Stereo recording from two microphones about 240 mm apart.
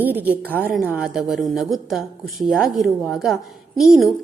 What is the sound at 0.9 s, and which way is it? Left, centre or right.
A woman's voice, centre.